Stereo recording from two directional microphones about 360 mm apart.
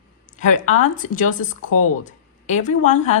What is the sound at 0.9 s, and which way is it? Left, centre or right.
Speech, left.